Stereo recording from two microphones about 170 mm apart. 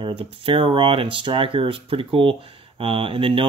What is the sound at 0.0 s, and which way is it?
Speech, 35° right (ahead or behind).